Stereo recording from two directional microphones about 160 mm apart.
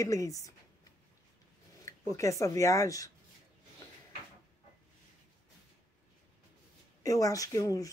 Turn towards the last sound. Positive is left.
turn(degrees=20)  # may be behind; listen again after turning